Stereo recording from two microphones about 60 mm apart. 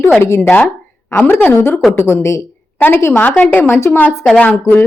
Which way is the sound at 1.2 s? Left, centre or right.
Left.